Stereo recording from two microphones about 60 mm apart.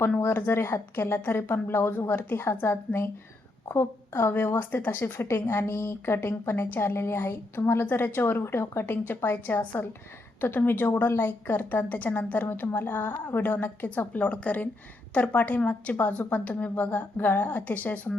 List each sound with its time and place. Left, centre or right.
0.2 s a woman's voice: left